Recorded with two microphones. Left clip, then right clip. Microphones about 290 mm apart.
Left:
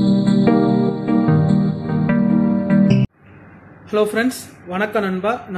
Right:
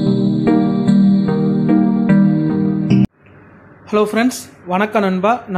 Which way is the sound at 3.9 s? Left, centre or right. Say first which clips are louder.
Right 2 dB; right.